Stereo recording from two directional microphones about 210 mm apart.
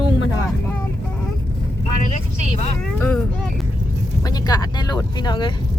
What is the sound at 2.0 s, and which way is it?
Speech, 35° left (ahead or behind).